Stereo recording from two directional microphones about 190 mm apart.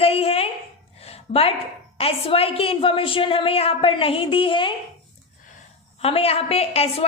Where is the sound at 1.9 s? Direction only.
30° left (ahead or behind).